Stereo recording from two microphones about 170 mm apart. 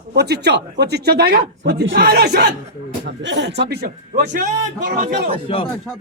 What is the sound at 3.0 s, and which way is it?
Speech, 90° right.